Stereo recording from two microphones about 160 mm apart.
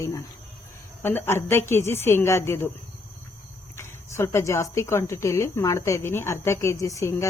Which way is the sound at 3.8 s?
15° left (ahead or behind).